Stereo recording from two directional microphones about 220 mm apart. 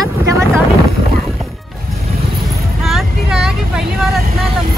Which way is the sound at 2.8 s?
Centre (ahead or behind).